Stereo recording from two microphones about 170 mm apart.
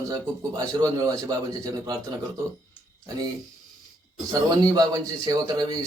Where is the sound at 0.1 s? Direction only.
20° right (ahead or behind).